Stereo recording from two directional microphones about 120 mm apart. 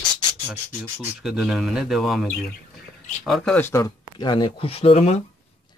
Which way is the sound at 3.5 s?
20° left (ahead or behind).